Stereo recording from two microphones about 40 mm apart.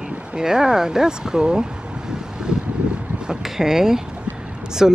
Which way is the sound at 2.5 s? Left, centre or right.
Right.